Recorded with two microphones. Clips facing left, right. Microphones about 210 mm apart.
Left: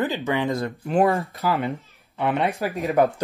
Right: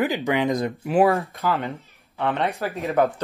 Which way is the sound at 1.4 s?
15° left (ahead or behind).